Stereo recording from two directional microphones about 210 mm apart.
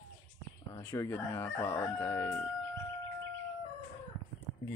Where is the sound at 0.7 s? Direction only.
15° left (ahead or behind).